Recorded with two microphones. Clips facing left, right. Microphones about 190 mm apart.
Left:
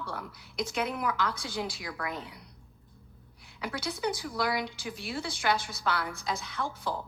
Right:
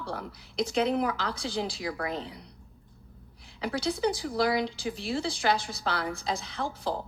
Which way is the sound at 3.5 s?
30° right (ahead or behind).